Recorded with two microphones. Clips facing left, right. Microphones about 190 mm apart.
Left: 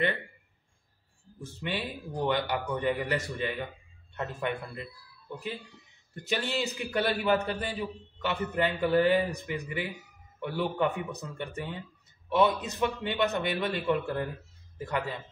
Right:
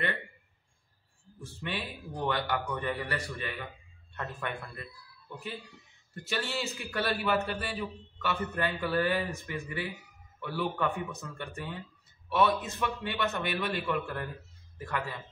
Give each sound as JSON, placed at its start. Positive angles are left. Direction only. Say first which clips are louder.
{"t": 1.4, "sound": "a man's voice", "louder": "left 3 dB", "side_deg": 20}
{"t": 6.2, "sound": "a man's voice", "louder": "left 3 dB", "side_deg": 20}